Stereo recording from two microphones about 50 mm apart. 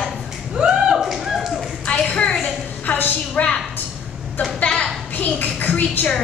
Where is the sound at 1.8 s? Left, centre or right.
Left.